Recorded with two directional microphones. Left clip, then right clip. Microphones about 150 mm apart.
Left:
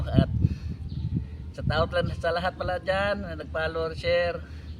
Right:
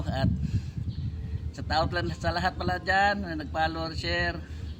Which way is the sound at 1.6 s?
15° left (ahead or behind).